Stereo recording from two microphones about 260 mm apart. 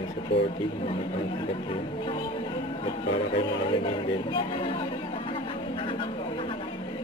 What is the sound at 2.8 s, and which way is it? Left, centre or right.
Speech, centre.